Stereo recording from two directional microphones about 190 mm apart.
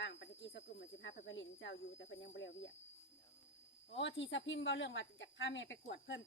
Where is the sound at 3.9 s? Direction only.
75° left (ahead or behind).